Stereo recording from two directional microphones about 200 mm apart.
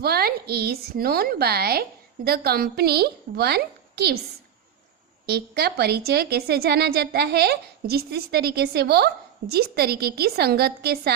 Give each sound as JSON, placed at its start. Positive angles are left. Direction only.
{"t": 0.0, "sound": "a woman's voice", "side_deg": -50}
{"t": 5.2, "sound": "a woman's voice", "side_deg": -55}